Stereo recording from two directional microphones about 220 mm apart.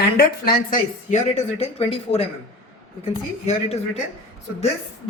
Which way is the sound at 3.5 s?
30° left (ahead or behind).